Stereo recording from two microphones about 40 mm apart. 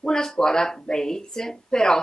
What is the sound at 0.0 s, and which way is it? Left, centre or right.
A woman's voice, centre.